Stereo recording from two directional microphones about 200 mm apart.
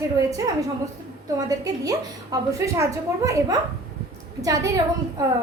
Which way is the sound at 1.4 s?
20° right (ahead or behind).